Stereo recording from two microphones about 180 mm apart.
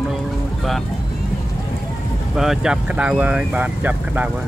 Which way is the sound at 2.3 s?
Centre (ahead or behind).